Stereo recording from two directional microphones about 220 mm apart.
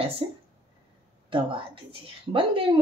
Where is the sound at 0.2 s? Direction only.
25° right (ahead or behind).